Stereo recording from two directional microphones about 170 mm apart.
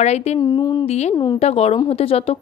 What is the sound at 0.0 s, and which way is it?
Speech, 40° left (ahead or behind).